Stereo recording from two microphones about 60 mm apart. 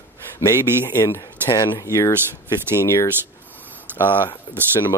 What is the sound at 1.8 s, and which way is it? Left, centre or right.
Speech, left.